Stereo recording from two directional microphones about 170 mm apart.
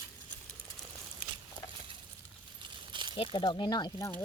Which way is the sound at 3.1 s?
30° left (ahead or behind).